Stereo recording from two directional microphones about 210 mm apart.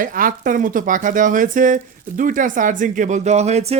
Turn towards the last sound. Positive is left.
turn(degrees=-30)  # may be behind; listen again after turning